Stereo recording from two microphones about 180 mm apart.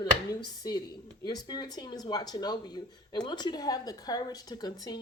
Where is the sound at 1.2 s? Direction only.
25° left (ahead or behind).